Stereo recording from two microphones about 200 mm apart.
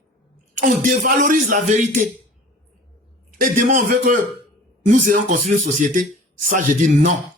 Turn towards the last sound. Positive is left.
turn(degrees=-40)  # may be behind; listen again after turning